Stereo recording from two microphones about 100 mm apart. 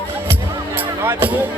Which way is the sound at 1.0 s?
20° right (ahead or behind).